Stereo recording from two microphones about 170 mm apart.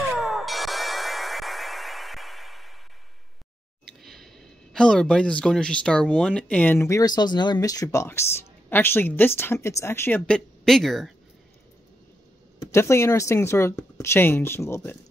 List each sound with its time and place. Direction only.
0.1 s music: centre (ahead or behind)
3.8 s speech: centre (ahead or behind)
12.7 s speech: 15° left (ahead or behind)